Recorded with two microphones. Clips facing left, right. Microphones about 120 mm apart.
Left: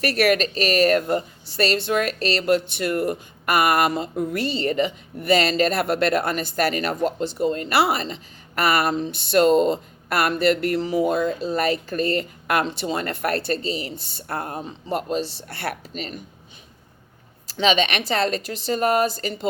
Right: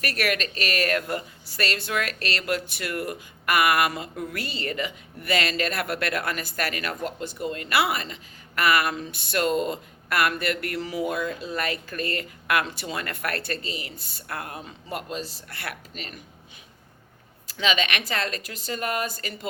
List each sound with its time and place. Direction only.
0.0 s a woman's voice: 35° left (ahead or behind)
11.0 s a woman's voice: 40° left (ahead or behind)
14.6 s a woman's voice: 20° left (ahead or behind)
15.4 s a woman's voice: 35° left (ahead or behind)
17.6 s a woman's voice: 30° left (ahead or behind)